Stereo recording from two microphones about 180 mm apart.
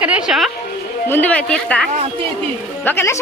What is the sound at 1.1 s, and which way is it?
Speech, 10° left (ahead or behind).